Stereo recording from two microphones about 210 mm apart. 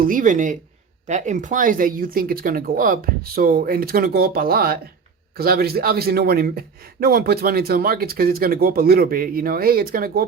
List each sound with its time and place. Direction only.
0.0 s speech: 40° right (ahead or behind)